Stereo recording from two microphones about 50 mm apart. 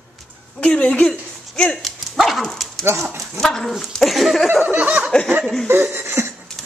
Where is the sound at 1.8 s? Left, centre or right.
Centre.